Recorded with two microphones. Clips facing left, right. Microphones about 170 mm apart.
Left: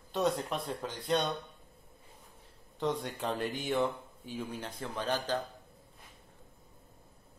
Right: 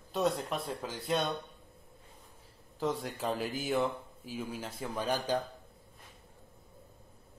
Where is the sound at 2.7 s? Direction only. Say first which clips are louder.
Even; centre (ahead or behind).